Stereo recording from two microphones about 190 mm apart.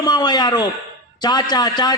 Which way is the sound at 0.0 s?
20° left (ahead or behind).